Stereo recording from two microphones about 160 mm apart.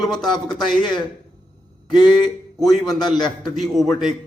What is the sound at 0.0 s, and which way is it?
Speech, centre (ahead or behind).